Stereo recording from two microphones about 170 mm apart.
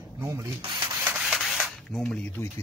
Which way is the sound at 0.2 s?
15° right (ahead or behind).